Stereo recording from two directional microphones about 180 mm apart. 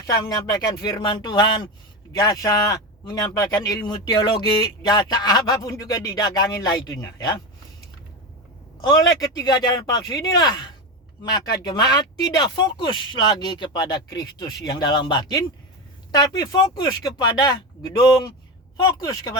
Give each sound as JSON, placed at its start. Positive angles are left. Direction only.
{"t": 0.1, "sound": "speech", "side_deg": 20}
{"t": 8.8, "sound": "speech", "side_deg": 20}